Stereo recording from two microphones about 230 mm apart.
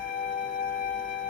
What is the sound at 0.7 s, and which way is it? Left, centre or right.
Music, left.